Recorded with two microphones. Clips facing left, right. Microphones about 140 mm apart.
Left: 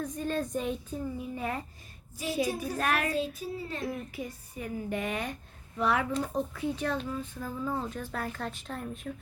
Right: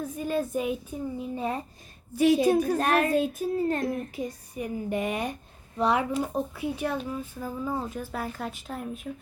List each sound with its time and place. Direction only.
0.0 s speech: 10° right (ahead or behind)
1.2 s a child's voice: 20° right (ahead or behind)
2.1 s a woman's voice: 65° right (ahead or behind)
2.7 s a child's voice: 25° right (ahead or behind)
3.1 s child singing: 50° right (ahead or behind)
4.3 s speech: 15° right (ahead or behind)